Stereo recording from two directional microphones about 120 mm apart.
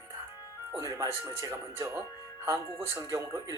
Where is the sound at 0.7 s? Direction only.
30° right (ahead or behind).